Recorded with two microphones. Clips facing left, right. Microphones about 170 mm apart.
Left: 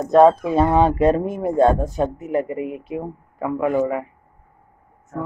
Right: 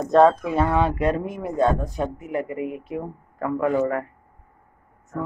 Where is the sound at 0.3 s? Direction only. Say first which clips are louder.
Left 4 dB; 20° left (ahead or behind).